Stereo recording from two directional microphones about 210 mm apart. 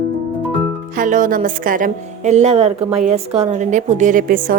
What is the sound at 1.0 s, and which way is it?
A woman's voice, 40° right (ahead or behind).